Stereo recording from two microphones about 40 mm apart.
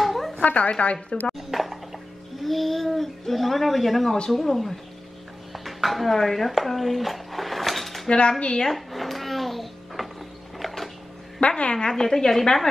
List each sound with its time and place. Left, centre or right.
0.0 s a sound: centre
0.4 s a woman's voice: left
1.5 s speech: centre
6.6 s dishes: centre
8.1 s speech: left
8.6 s music: centre
10.6 s a sound: centre
11.3 s a woman's voice: left
11.7 s a woman's voice: centre